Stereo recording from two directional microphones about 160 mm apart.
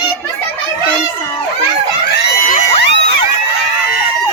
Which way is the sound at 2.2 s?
90° left.